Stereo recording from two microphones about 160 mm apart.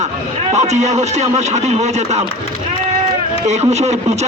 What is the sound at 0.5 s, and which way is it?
A man's voice, 45° right (ahead or behind).